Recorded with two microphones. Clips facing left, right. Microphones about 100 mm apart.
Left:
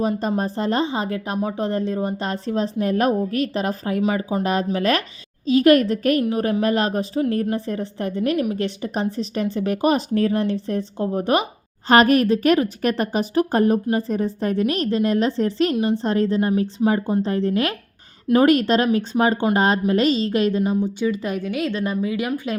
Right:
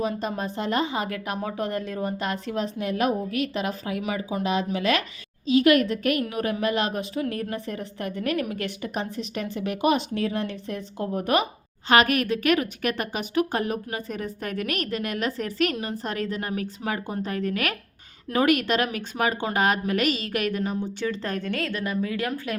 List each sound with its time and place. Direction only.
0.0 s a woman's voice: 35° left (ahead or behind); by 22.3 s 15° left (ahead or behind)